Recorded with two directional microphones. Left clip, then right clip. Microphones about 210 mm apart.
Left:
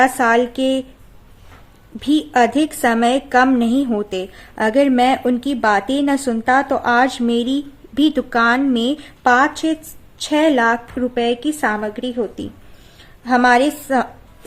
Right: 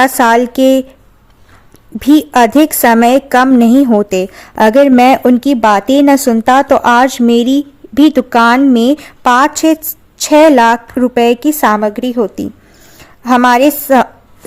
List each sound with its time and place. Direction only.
0.0 s a woman's voice: 40° right (ahead or behind)
2.0 s a woman's voice: 40° right (ahead or behind)